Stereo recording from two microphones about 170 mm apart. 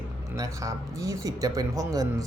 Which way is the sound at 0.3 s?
20° right (ahead or behind).